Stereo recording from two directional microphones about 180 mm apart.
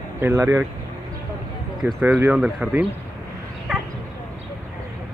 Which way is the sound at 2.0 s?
10° right (ahead or behind).